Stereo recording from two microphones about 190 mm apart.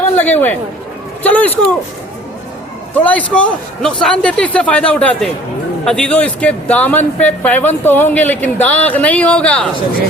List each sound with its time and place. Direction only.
0.2 s speech: 10° left (ahead or behind)
2.9 s speech: 10° left (ahead or behind)